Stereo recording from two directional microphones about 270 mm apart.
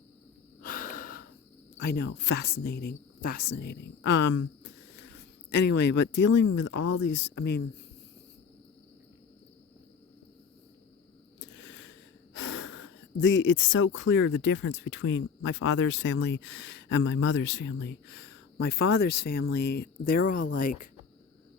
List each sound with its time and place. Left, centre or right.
0.6 s breathing: left
1.8 s speech: left
5.1 s a sound: left
6.2 s speech: left
11.3 s speech: left